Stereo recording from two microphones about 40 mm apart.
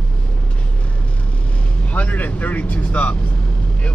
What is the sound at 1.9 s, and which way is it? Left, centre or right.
Speech, left.